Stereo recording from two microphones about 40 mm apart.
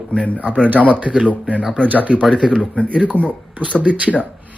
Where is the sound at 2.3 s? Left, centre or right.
Centre.